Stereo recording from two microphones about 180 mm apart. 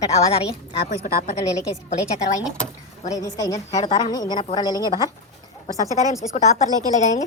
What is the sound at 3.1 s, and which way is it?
A woman's voice, 20° left (ahead or behind).